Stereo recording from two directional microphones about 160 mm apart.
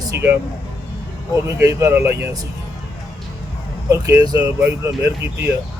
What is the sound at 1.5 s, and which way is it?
Speech, 20° right (ahead or behind).